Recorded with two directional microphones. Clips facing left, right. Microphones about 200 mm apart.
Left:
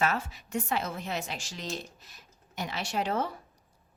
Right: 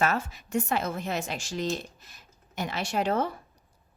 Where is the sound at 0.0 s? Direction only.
45° right (ahead or behind).